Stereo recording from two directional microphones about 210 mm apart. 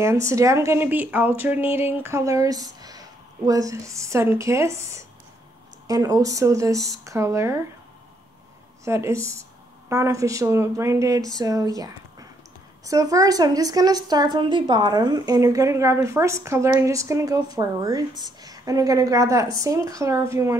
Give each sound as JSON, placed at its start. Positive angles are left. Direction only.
{"t": 0.0, "sound": "a woman's voice", "side_deg": -15}
{"t": 8.8, "sound": "a woman's voice", "side_deg": -15}